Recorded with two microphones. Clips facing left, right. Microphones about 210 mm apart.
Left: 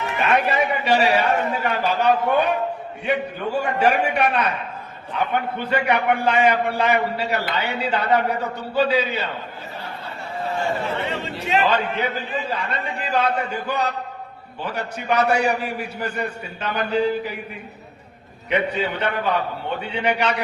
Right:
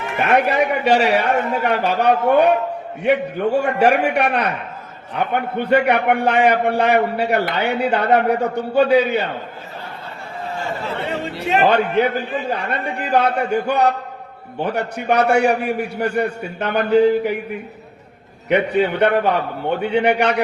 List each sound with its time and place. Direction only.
0.2 s a man's voice: 55° right (ahead or behind)
11.2 s a man's voice: 60° right (ahead or behind)
18.4 s a man's voice: 60° right (ahead or behind)